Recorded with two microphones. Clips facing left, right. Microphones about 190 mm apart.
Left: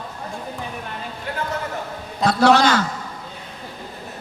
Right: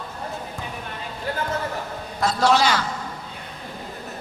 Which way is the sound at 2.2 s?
65° left (ahead or behind).